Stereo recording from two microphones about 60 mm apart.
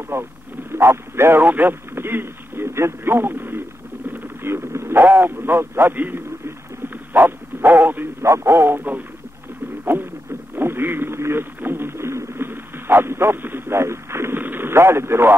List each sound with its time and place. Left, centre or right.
0.1 s a sound: right
1.4 s speech: right
7.2 s bow-wow: right
8.2 s speech: right
9.9 s a sound: right
10.5 s radio: right
12.4 s radio: right
14.4 s radio: right